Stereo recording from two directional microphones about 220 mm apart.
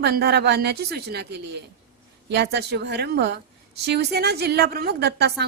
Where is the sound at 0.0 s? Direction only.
45° right (ahead or behind).